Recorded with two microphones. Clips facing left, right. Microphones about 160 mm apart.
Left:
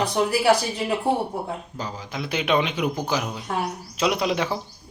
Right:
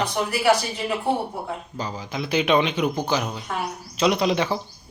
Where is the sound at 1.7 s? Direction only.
Centre (ahead or behind).